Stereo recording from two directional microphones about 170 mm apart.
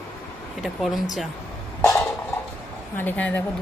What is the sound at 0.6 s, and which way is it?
Speech, centre (ahead or behind).